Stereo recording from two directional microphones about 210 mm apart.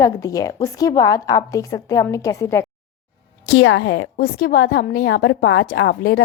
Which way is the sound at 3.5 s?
60° left (ahead or behind).